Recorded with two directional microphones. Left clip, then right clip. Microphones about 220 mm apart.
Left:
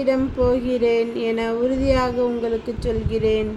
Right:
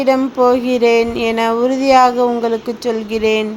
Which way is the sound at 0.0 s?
15° right (ahead or behind).